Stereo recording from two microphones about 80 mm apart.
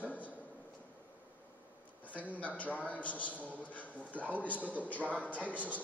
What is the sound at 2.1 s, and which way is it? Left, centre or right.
A man's voice, centre.